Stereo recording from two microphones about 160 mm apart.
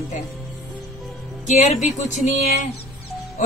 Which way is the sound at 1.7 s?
45° left (ahead or behind).